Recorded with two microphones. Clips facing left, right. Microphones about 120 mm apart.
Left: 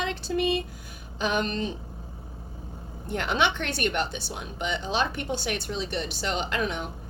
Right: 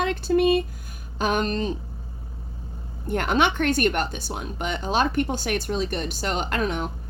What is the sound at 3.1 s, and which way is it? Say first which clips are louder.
Speech: right 4 dB; 50° right (ahead or behind).